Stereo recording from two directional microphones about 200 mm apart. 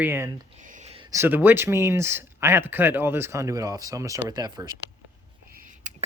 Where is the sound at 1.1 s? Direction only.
10° right (ahead or behind).